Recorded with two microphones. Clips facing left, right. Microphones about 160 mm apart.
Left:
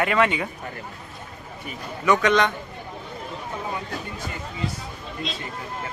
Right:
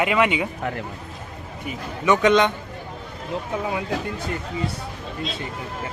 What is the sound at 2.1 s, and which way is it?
Speech, 20° right (ahead or behind).